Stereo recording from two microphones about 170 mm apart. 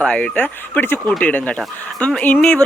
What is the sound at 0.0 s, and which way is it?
Speech, 5° left (ahead or behind).